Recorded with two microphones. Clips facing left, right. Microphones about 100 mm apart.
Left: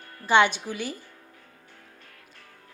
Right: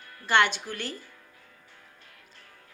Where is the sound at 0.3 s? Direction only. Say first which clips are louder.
Left 3 dB; 15° left (ahead or behind).